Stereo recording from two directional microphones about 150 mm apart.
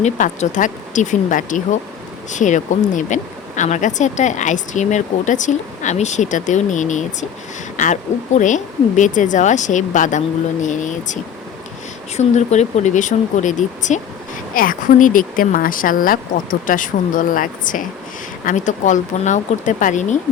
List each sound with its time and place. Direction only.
0.0 s speech: 55° left (ahead or behind)
8.4 s speech: 55° left (ahead or behind)
14.5 s speech: 65° left (ahead or behind)